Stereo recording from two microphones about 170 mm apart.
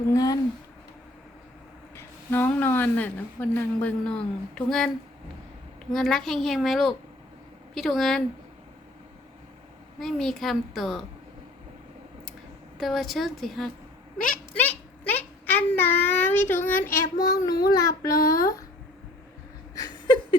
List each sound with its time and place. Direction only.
0.1 s child singing: 20° left (ahead or behind)
2.0 s a woman's voice: 10° left (ahead or behind)
5.9 s a woman's voice: centre (ahead or behind)
10.0 s a woman's voice: centre (ahead or behind)
12.8 s a woman's voice: centre (ahead or behind); by 17.6 s 20° left (ahead or behind)
17.7 s child singing: 20° left (ahead or behind)
19.7 s a sound: 25° left (ahead or behind)